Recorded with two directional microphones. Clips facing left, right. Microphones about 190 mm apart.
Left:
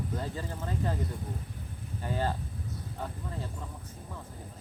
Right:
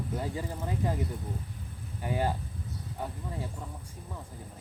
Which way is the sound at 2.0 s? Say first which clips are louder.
Right 2 dB; 15° right (ahead or behind).